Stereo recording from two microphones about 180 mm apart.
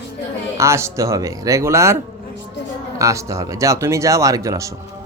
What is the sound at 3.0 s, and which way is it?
Speech, 15° right (ahead or behind).